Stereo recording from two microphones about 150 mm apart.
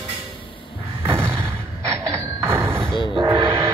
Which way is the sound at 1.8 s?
20° right (ahead or behind).